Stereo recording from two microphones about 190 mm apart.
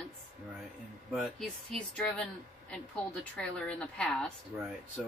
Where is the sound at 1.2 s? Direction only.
5° left (ahead or behind).